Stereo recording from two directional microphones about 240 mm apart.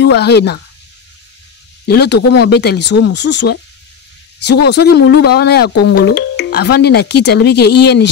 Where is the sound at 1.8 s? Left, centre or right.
Left.